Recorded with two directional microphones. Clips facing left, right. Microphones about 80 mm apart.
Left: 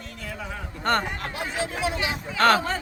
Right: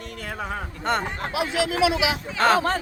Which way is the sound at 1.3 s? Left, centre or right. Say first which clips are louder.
Right 5 dB; right.